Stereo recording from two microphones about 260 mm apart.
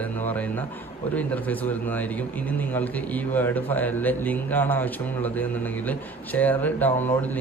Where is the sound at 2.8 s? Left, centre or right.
Centre.